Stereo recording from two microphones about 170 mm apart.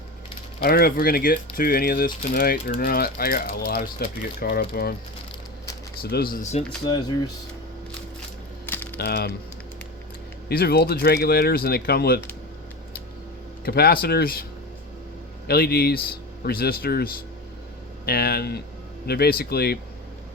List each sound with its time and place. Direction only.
0.6 s speech: 60° left (ahead or behind)
6.0 s speech: 65° left (ahead or behind)
6.4 s speech: 40° left (ahead or behind)
8.6 s a sound: 10° left (ahead or behind)
9.0 s speech: 70° left (ahead or behind)
10.5 s speech: 65° left (ahead or behind)
13.7 s speech: 65° left (ahead or behind)
15.4 s speech: 65° left (ahead or behind)